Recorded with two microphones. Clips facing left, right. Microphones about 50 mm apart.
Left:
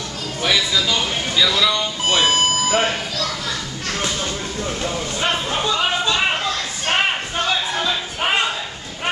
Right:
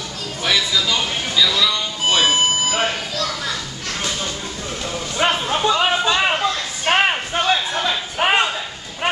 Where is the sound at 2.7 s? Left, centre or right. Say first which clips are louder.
Left 2 dB; centre.